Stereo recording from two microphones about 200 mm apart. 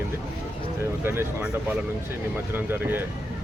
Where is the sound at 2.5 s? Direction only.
10° right (ahead or behind).